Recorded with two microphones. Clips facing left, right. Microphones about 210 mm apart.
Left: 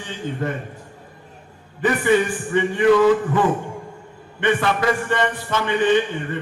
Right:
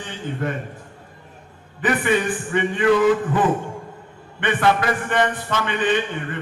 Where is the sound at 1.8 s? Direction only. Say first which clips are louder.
Left 2 dB; 20° right (ahead or behind).